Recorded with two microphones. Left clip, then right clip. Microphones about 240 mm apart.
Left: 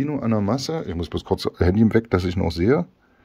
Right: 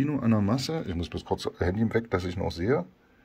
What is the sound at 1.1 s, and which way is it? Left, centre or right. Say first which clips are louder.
Speech: left 8 dB; left.